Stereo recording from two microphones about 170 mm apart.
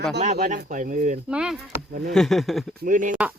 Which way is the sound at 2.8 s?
50° right (ahead or behind).